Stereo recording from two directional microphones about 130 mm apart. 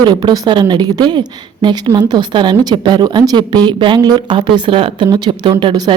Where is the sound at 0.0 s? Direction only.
35° right (ahead or behind).